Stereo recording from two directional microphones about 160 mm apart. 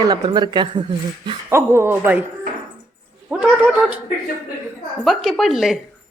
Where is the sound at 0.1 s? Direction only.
30° right (ahead or behind).